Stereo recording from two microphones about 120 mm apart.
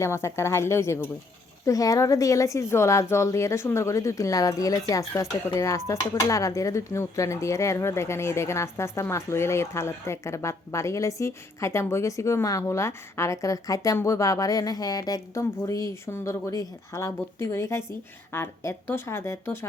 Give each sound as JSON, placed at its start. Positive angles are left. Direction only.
{"t": 0.0, "sound": "speech", "side_deg": 25}